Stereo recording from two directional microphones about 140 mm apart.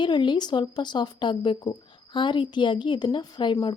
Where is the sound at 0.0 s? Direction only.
35° left (ahead or behind).